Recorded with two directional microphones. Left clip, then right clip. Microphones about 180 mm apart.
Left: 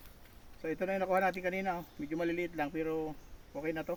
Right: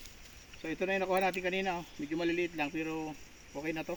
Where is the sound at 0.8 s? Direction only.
Centre (ahead or behind).